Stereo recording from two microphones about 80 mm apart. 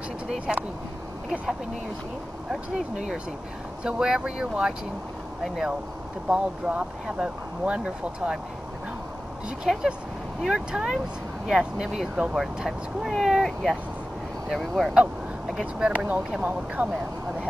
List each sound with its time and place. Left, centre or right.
0.5 s speech: centre
2.5 s speech: centre
6.2 s speech: centre
9.7 s speech: centre
15.6 s speech: centre